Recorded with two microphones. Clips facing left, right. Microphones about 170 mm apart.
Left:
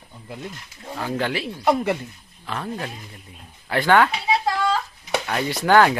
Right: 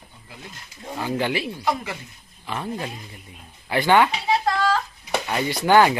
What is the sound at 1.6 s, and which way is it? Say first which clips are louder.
Speech: left 9 dB; 55° left (ahead or behind).